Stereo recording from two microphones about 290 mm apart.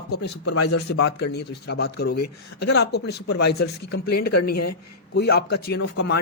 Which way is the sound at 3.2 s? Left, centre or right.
Left.